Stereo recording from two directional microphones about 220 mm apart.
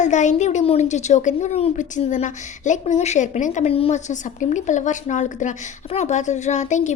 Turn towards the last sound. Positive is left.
turn(degrees=30)  # may be behind; listen again after turning